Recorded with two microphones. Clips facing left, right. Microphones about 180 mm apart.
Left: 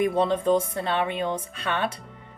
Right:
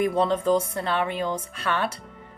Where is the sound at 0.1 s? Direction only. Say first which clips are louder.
Even; 25° left (ahead or behind).